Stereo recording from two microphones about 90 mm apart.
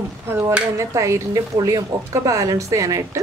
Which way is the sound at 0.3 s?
25° right (ahead or behind).